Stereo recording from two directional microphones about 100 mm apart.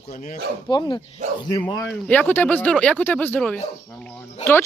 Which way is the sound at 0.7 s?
50° left (ahead or behind).